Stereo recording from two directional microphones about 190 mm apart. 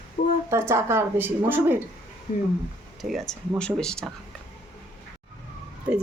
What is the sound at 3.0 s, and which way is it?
Speech, centre (ahead or behind).